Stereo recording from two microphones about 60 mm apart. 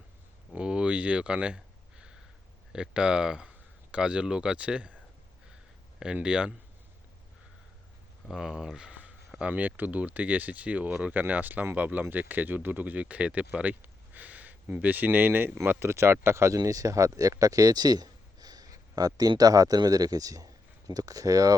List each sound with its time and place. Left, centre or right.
0.5 s a sound: centre
2.7 s speech: centre
6.2 s speech: centre
8.3 s speech: centre; by 16.6 s right
16.6 s speech: right